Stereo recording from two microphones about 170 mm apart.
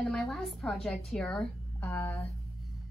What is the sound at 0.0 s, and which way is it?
Speech, centre (ahead or behind).